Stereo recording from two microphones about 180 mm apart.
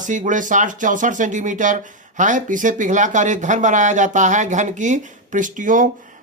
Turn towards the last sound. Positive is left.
turn(degrees=-45)  # may be behind; listen again after turning